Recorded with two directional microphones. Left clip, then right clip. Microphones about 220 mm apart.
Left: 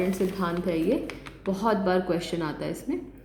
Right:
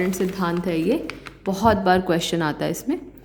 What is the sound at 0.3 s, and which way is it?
A woman's voice, 45° right (ahead or behind).